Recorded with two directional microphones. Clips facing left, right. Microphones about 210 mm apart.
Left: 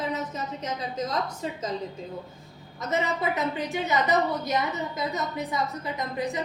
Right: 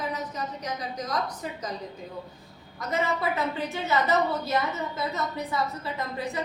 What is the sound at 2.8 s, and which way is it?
A woman's voice, 20° left (ahead or behind).